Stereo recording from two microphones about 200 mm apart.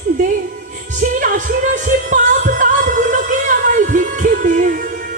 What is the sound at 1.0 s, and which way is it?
Music, 40° right (ahead or behind).